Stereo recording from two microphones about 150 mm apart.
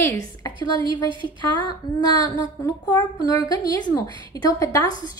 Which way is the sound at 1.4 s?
30° left (ahead or behind).